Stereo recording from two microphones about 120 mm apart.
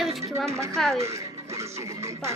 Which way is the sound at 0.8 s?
5° left (ahead or behind).